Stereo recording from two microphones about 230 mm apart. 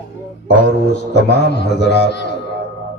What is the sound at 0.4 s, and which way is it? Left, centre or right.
A man's voice, left.